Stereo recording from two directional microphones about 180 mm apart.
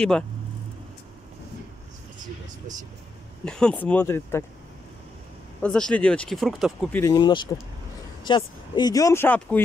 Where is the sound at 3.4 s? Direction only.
5° left (ahead or behind).